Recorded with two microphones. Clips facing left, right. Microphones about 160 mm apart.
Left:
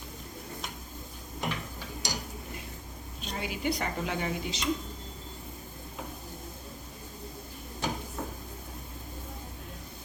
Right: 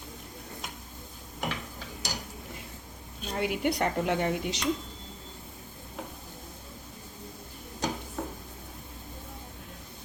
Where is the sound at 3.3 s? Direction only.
65° right (ahead or behind).